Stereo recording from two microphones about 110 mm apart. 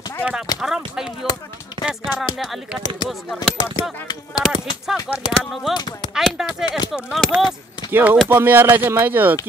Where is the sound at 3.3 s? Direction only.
40° left (ahead or behind).